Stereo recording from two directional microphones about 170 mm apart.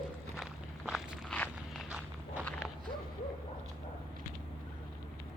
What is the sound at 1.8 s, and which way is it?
Walk, 5° right (ahead or behind).